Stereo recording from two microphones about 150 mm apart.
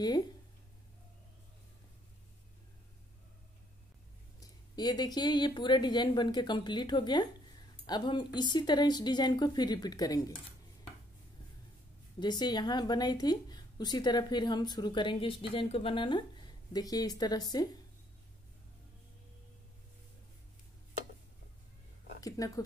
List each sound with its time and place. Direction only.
4.4 s a woman's voice: 25° left (ahead or behind)
12.2 s a woman's voice: 30° left (ahead or behind)
22.4 s a woman's voice: 25° left (ahead or behind)